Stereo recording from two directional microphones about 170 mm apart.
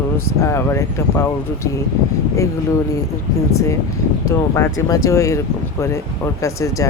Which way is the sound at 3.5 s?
15° left (ahead or behind).